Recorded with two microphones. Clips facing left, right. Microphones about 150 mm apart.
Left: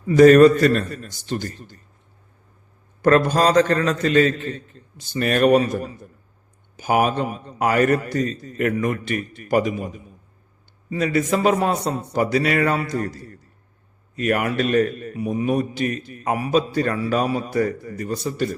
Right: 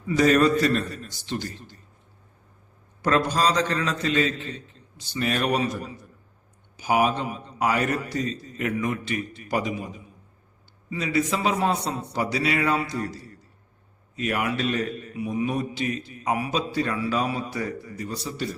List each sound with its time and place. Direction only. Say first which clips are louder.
0.1 s a man's voice: left 9 dB; 50° left (ahead or behind)
3.0 s a man's voice: left 6 dB; 50° left (ahead or behind)